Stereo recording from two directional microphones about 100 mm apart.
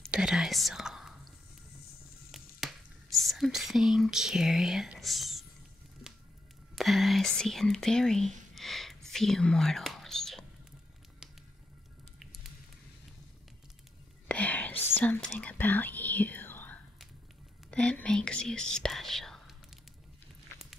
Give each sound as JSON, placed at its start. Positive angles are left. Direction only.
{"t": 0.1, "sound": "speech", "side_deg": -5}
{"t": 2.3, "sound": "whispering", "side_deg": 0}
{"t": 6.7, "sound": "whispering", "side_deg": 0}
{"t": 11.2, "sound": "finger snapping", "side_deg": -5}
{"t": 14.2, "sound": "whispering", "side_deg": 15}